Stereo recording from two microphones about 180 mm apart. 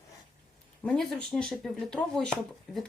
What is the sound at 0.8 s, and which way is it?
Speech, 5° left (ahead or behind).